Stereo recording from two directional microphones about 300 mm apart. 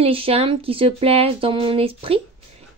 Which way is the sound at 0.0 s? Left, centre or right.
Centre.